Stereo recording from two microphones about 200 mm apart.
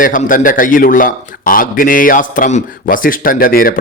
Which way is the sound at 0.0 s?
40° left (ahead or behind).